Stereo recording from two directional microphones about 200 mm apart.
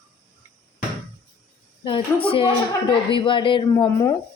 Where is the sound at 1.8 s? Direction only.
25° left (ahead or behind).